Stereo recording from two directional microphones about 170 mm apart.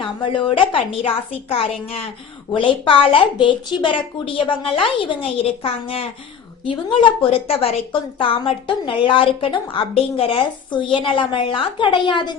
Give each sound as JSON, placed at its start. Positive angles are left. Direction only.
{"t": 0.0, "sound": "a woman's voice", "side_deg": 30}